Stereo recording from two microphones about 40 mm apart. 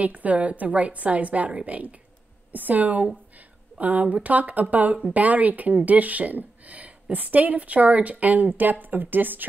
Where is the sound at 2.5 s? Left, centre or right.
Right.